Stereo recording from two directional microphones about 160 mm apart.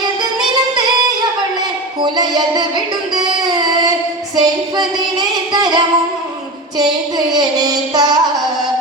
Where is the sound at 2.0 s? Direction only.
25° right (ahead or behind).